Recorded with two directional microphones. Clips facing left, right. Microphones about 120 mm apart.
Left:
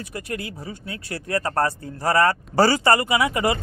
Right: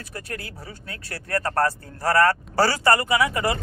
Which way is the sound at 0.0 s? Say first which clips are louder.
Left 4 dB; 15° left (ahead or behind).